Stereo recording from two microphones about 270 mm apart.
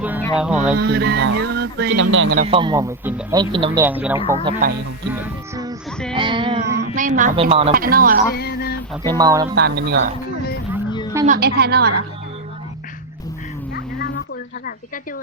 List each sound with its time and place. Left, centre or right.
0.3 s speech: centre
0.8 s music: right
2.0 s speech: right
2.4 s speech: centre
4.6 s music: right
5.2 s music: centre
6.1 s a sound: centre
6.7 s a sound: right
7.7 s music: right
8.4 s a sound: left
9.0 s speech: centre
9.6 s music: right
11.3 s music: right